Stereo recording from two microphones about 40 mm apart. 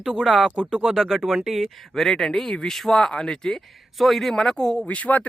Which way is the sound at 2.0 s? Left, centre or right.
Centre.